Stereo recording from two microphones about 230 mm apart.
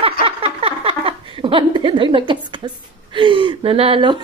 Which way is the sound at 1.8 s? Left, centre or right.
Right.